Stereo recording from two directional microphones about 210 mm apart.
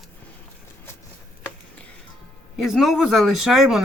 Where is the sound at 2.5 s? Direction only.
Centre (ahead or behind).